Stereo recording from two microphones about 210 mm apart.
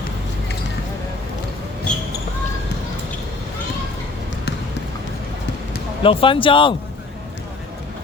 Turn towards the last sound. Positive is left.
turn(degrees=25)  # may be behind; listen again after turning